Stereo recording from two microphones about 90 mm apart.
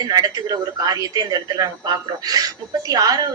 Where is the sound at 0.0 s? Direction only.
45° right (ahead or behind).